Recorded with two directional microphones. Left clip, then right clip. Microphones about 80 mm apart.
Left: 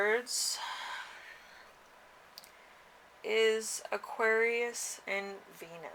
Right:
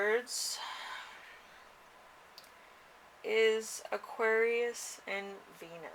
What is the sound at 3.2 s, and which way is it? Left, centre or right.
Speech, left.